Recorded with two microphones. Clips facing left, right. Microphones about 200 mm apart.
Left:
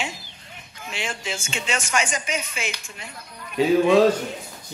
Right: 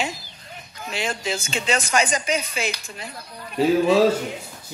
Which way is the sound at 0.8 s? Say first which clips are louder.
Right 4 dB; 35° right (ahead or behind).